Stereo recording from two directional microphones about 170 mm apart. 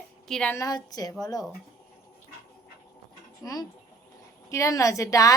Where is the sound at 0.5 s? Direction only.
20° left (ahead or behind).